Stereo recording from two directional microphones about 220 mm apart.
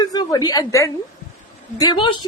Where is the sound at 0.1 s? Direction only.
15° left (ahead or behind).